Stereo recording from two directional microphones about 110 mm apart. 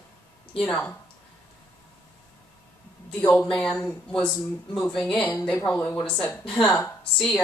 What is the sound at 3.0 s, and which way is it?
Speech, 10° left (ahead or behind).